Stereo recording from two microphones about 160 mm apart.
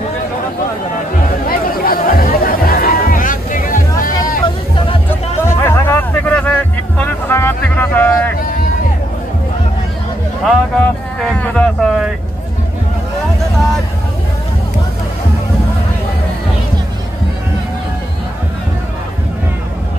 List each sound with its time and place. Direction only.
1.5 s music: 65° left (ahead or behind)
5.4 s a sound: 15° left (ahead or behind)
10.4 s speech: centre (ahead or behind)